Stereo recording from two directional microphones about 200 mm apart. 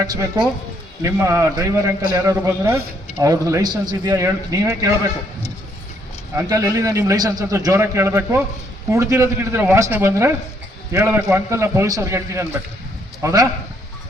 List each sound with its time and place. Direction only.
0.1 s a man's voice: 20° right (ahead or behind)
6.3 s a man's voice: 15° right (ahead or behind)
11.2 s a man's voice: 5° right (ahead or behind)
11.5 s a man's voice: 15° right (ahead or behind)